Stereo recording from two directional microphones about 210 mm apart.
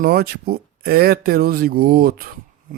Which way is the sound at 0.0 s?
45° right (ahead or behind).